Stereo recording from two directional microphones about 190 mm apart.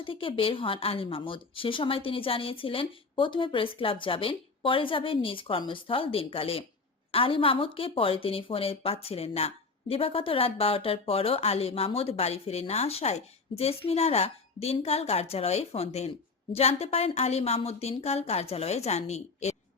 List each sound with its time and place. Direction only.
0.0 s a woman's voice: 25° left (ahead or behind)